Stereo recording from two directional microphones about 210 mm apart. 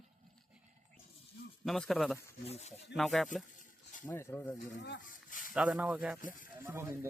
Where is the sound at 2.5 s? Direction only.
30° left (ahead or behind).